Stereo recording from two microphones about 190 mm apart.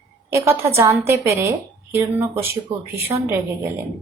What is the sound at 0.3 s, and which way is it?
A woman's voice, 15° right (ahead or behind).